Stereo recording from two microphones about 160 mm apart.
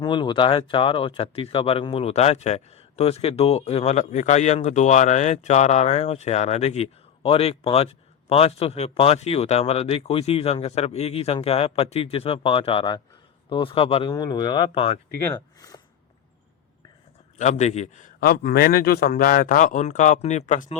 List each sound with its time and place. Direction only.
0.0 s speech: 30° left (ahead or behind)
15.3 s a sound: 20° left (ahead or behind)
17.3 s a man's voice: 45° left (ahead or behind)
18.2 s a man's voice: 70° left (ahead or behind); by 20.7 s 50° left (ahead or behind)